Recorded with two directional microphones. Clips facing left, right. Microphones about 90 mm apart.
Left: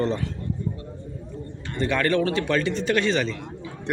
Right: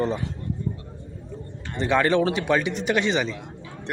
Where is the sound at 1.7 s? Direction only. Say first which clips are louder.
Right 2 dB; 20° right (ahead or behind).